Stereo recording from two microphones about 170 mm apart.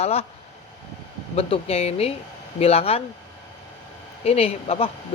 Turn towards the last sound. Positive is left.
turn(degrees=35)  # may be behind; listen again after turning